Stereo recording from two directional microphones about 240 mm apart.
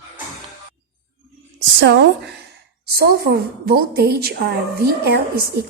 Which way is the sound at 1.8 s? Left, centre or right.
Right.